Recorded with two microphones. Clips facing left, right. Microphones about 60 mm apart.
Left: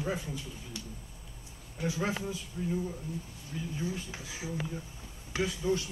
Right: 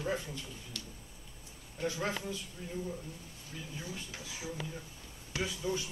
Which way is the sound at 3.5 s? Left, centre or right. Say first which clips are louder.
Left 7 dB; centre.